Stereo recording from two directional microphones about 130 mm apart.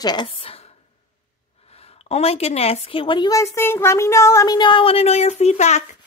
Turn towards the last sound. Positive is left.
turn(degrees=60)  # may be behind; listen again after turning